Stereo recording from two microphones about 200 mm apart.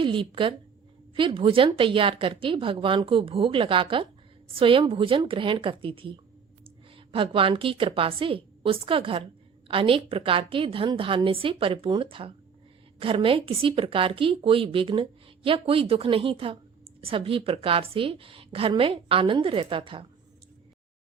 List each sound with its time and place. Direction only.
0.0 s a woman's voice: 25° right (ahead or behind)